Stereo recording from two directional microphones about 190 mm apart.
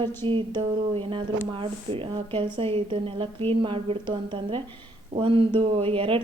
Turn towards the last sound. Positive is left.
turn(degrees=-30)  # may be behind; listen again after turning